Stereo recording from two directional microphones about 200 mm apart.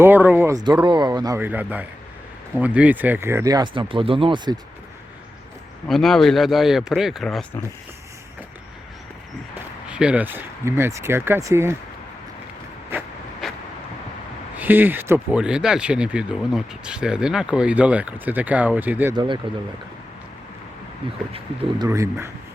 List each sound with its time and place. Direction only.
0.0 s speech: 10° right (ahead or behind)
5.9 s speech: centre (ahead or behind)
9.9 s speech: 5° right (ahead or behind)
12.9 s vehicle: 10° right (ahead or behind)
13.4 s vehicle: centre (ahead or behind)
14.5 s speech: 10° right (ahead or behind)
19.1 s speech: 25° right (ahead or behind)
21.8 s speech: 15° right (ahead or behind)